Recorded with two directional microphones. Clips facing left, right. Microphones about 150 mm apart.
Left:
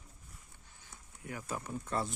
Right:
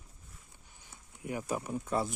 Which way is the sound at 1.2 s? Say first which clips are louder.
Right 6 dB; 15° right (ahead or behind).